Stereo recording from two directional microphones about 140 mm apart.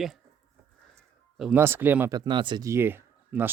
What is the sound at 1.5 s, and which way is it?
Speech, 15° right (ahead or behind).